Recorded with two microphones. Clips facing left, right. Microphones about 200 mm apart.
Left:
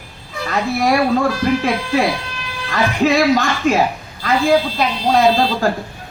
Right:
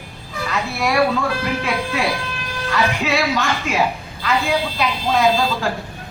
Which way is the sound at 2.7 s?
40° left (ahead or behind).